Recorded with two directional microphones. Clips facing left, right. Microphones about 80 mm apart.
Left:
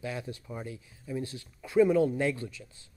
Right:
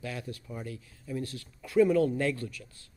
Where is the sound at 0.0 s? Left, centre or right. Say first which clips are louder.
Left 2 dB; left.